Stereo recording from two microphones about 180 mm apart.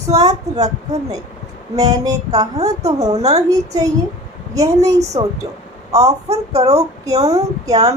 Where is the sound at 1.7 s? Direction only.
20° right (ahead or behind).